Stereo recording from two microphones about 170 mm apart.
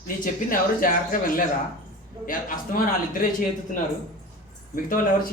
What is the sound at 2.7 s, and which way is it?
Speech, 50° left (ahead or behind).